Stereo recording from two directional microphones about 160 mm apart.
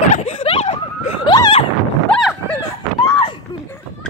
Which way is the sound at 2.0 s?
5° left (ahead or behind).